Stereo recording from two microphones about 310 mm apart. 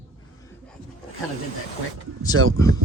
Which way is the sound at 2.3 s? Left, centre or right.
Right.